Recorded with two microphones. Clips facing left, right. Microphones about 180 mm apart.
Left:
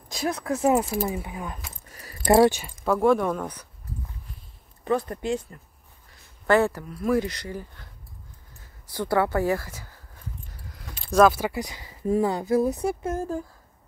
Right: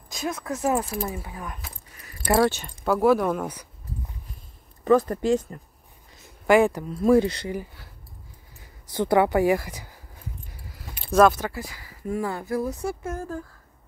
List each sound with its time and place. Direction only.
0.1 s speech: 30° left (ahead or behind)
1.9 s keys jangling: 35° left (ahead or behind)
2.3 s speech: 15° left (ahead or behind)
2.8 s speech: centre (ahead or behind)
4.8 s speech: 40° right (ahead or behind)
6.1 s speech: 15° right (ahead or behind)
7.5 s speech: 5° right (ahead or behind)
8.9 s speech: 20° right (ahead or behind)
10.7 s speech: 5° right (ahead or behind); by 13.4 s 25° left (ahead or behind)